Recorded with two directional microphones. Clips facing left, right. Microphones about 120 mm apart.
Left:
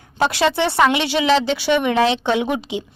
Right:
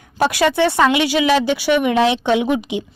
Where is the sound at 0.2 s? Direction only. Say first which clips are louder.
Right 2 dB; 15° right (ahead or behind).